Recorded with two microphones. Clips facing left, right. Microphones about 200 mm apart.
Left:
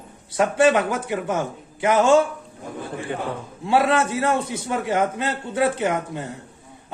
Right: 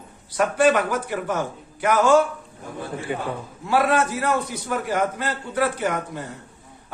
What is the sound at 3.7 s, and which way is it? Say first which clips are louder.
A man's voice: left 1 dB; 25° left (ahead or behind).